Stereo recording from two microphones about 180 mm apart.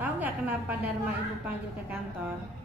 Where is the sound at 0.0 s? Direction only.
10° right (ahead or behind).